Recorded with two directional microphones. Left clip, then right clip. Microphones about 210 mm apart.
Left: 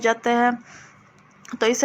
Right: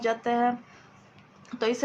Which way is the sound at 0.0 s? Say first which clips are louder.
Left 6 dB; 35° left (ahead or behind).